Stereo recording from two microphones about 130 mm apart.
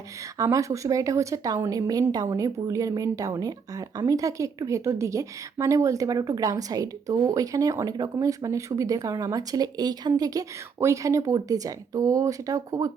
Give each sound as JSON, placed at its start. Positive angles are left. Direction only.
{"t": 0.3, "sound": "a woman's voice", "side_deg": -25}